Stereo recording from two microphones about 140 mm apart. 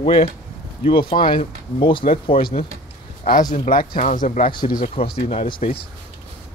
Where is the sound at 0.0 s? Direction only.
40° left (ahead or behind).